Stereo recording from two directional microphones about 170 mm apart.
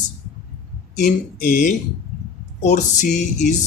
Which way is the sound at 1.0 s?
50° left (ahead or behind).